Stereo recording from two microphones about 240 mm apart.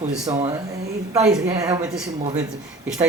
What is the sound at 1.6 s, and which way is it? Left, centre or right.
Speech, centre.